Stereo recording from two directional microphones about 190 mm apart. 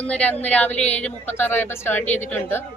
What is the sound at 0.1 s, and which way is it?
Speech, 5° left (ahead or behind).